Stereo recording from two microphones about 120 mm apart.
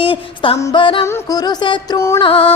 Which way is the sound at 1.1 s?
30° left (ahead or behind).